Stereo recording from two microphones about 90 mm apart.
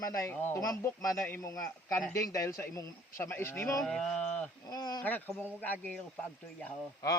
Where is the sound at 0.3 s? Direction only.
25° left (ahead or behind).